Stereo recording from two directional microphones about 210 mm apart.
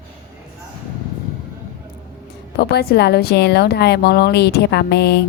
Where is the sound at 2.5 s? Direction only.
50° left (ahead or behind).